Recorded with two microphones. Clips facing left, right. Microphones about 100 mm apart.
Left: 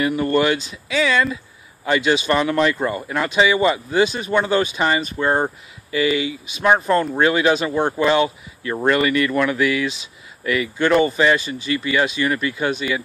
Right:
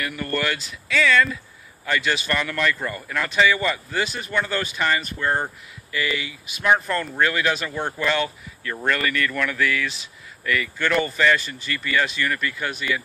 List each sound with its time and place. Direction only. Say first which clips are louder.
0.0 s speech: left 8 dB; 25° left (ahead or behind)